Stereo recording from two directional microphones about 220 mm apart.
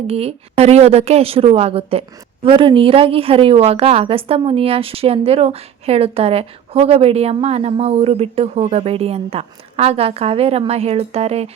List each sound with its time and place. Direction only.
0.1 s a woman's voice: 25° right (ahead or behind)